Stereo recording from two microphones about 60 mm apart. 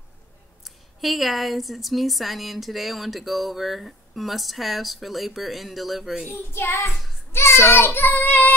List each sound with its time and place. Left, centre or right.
0.7 s a woman's voice: centre
7.3 s child singing: left